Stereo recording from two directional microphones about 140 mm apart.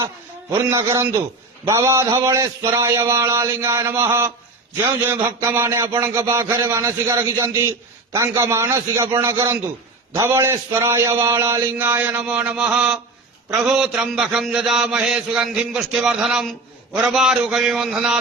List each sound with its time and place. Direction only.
0.7 s a man's voice: 20° right (ahead or behind)
11.3 s mantra: 20° right (ahead or behind); by 18.2 s 5° right (ahead or behind)